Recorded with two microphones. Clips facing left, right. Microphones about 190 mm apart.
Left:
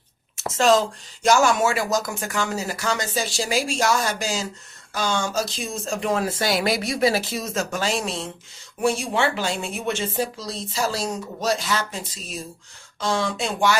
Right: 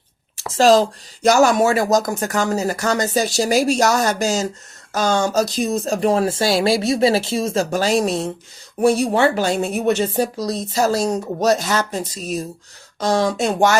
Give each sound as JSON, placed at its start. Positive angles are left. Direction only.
{"t": 0.3, "sound": "speech", "side_deg": -35}